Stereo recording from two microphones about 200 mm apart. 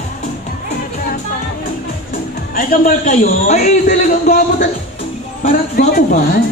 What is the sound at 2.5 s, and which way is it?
A man's voice, 45° left (ahead or behind).